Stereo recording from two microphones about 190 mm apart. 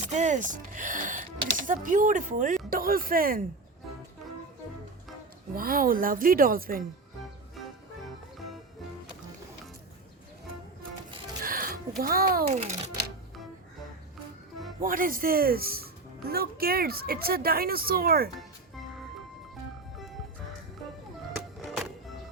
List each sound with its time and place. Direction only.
0.1 s speech: 40° right (ahead or behind)
5.5 s speech: 50° right (ahead or behind)
11.4 s music: 50° right (ahead or behind)
12.5 s a child's voice: 35° right (ahead or behind)
14.8 s speech: 45° right (ahead or behind)
21.3 s music: centre (ahead or behind)